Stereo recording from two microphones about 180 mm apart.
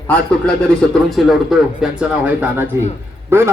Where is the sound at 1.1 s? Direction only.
Centre (ahead or behind).